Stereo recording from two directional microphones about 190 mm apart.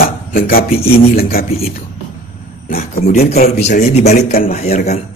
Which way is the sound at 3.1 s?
35° left (ahead or behind).